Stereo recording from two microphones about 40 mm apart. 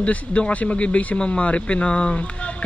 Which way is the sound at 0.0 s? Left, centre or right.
Left.